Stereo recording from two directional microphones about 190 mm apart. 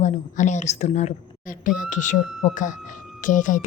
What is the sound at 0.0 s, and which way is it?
A woman's voice, 40° left (ahead or behind).